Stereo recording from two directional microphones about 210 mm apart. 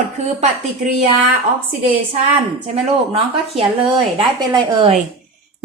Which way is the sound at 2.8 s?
30° right (ahead or behind).